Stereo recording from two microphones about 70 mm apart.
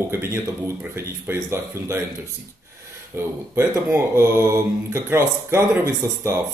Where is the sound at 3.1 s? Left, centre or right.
Right.